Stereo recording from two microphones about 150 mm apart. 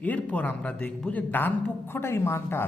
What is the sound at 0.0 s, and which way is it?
A man's voice, 10° left (ahead or behind).